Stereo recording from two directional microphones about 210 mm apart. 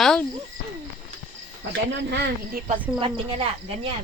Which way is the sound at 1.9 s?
55° right (ahead or behind).